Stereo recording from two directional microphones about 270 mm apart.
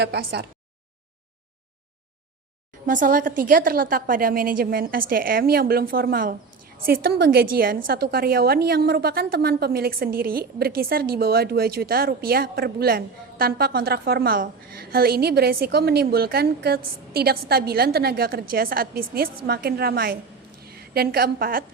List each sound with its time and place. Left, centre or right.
0.0 s speech: right
2.8 s a woman's voice: right